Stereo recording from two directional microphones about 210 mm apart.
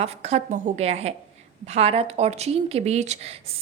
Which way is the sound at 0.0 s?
30° right (ahead or behind).